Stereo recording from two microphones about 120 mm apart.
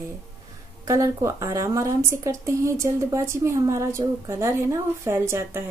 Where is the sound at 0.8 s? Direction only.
25° right (ahead or behind).